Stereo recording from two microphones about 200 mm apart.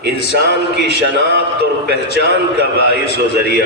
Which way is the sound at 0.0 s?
60° right (ahead or behind).